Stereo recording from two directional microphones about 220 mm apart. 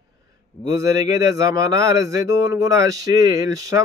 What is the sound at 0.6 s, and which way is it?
A man's voice, 15° right (ahead or behind).